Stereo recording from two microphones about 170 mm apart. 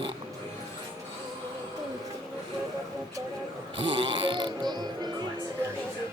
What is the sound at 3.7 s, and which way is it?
Music, 35° right (ahead or behind).